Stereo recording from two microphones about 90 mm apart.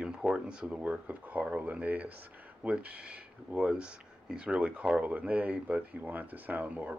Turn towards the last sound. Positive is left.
turn(degrees=-15)  # may be behind; listen again after turning